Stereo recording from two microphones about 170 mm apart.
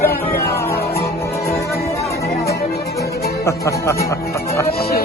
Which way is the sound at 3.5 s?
15° left (ahead or behind).